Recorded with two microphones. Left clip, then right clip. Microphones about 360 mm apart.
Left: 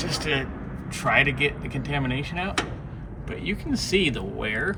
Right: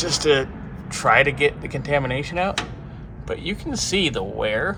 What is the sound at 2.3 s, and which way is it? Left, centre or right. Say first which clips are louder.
Speech: right 5 dB; centre.